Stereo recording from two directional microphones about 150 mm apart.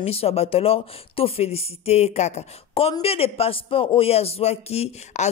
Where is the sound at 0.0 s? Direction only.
40° left (ahead or behind).